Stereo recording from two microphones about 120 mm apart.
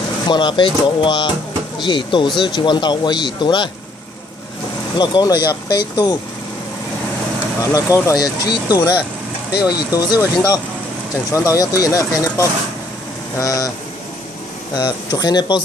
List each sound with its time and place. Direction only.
0.3 s speech: 40° left (ahead or behind)
4.9 s speech: 35° left (ahead or behind)
7.6 s speech: 25° left (ahead or behind)
14.8 s speech: 35° left (ahead or behind)